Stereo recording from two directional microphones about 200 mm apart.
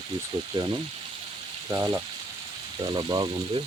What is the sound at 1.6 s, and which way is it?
Speech, 15° right (ahead or behind).